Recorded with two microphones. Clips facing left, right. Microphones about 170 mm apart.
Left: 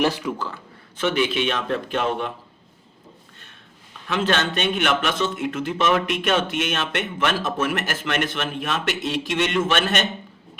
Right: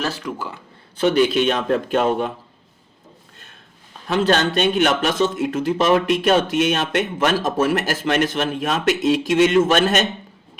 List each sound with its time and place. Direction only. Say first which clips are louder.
0.0 s speech: left 4 dB; 15° left (ahead or behind)
0.3 s speech: even; 10° right (ahead or behind)
0.9 s speech: right 6 dB; 35° right (ahead or behind)
4.0 s speech: right 5 dB; 35° right (ahead or behind)